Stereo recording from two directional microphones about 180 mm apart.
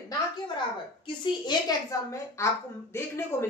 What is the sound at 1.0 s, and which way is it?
A woman's voice, 25° left (ahead or behind).